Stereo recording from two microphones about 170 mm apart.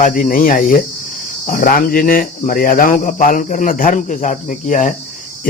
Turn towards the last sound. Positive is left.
turn(degrees=45)  # may be behind; listen again after turning